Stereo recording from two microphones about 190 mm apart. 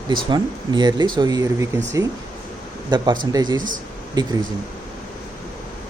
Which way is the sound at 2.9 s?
25° right (ahead or behind).